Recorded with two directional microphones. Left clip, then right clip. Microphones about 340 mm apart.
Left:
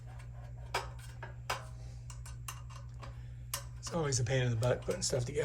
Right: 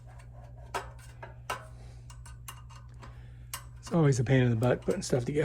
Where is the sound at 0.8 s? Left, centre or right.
Centre.